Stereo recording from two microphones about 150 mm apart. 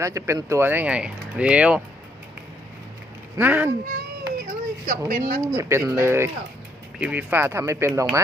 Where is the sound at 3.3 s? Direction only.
15° right (ahead or behind).